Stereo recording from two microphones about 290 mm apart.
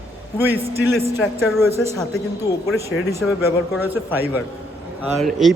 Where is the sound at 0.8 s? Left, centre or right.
Centre.